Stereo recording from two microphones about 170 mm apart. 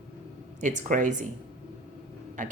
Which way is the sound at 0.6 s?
50° right (ahead or behind).